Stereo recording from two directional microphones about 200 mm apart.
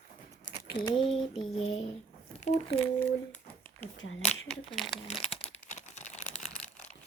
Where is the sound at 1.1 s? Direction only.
Centre (ahead or behind).